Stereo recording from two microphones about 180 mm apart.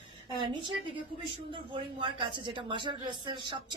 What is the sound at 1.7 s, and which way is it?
Speech, 25° right (ahead or behind).